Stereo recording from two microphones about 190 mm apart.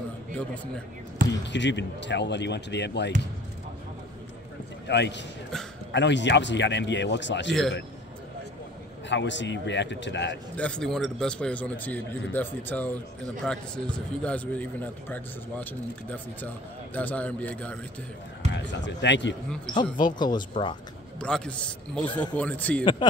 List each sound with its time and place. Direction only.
1.4 s speech: 65° left (ahead or behind)
4.8 s a man's voice: 65° left (ahead or behind)
9.1 s speech: 70° left (ahead or behind)
10.5 s a man's voice: 5° left (ahead or behind)
18.6 s speech: 70° left (ahead or behind)
19.7 s speech: 25° left (ahead or behind)
21.2 s a man's voice: 5° left (ahead or behind)